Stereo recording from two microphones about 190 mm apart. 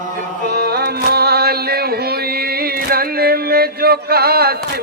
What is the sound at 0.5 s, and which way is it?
Music, 55° right (ahead or behind).